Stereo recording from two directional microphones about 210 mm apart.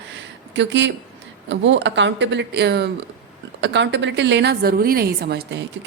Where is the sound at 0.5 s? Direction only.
60° right (ahead or behind).